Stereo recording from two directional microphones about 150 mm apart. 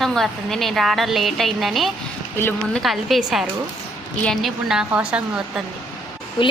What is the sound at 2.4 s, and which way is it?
Speech, 15° left (ahead or behind).